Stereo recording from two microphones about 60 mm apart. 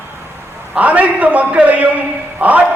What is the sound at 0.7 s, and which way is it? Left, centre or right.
A man's voice, right.